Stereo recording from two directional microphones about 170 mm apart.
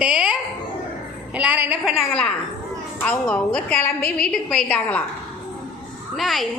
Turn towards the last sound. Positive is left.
turn(degrees=0)  # may be behind; listen again after turning